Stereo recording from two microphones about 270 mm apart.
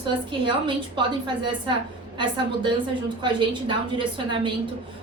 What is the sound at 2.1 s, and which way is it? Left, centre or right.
A woman's voice, centre.